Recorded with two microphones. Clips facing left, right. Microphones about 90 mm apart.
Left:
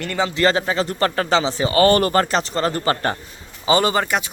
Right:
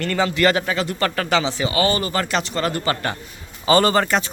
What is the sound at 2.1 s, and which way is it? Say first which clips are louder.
Speech: left 4 dB; 35° left (ahead or behind).